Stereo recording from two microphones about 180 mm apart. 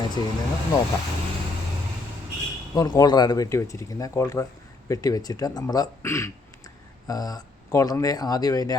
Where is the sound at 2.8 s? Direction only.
20° left (ahead or behind).